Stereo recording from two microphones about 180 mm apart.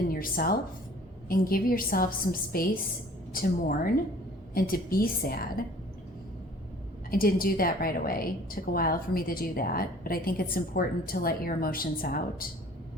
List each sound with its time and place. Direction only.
0.1 s a woman's voice: 55° left (ahead or behind)
7.1 s a woman's voice: 55° left (ahead or behind)